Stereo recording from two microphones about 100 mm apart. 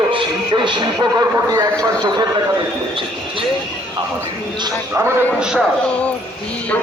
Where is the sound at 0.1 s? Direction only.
55° right (ahead or behind).